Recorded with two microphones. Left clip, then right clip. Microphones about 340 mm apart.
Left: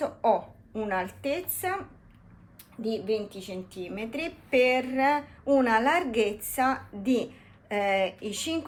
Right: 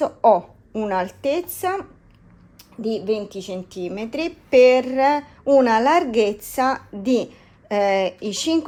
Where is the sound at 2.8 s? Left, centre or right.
Right.